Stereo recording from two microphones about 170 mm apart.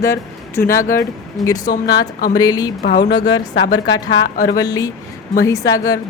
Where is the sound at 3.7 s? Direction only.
25° left (ahead or behind).